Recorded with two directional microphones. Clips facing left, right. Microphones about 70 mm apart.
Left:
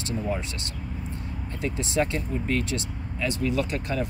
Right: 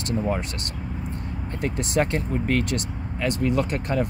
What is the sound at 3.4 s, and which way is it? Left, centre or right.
Speech, right.